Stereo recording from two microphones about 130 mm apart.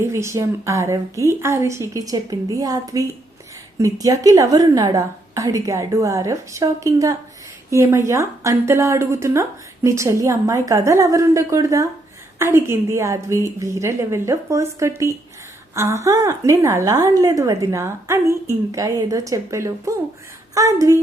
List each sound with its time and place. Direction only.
0.0 s speech: 20° right (ahead or behind)